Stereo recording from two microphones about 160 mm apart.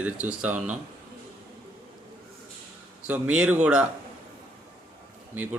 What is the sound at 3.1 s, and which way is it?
Speech, 10° right (ahead or behind).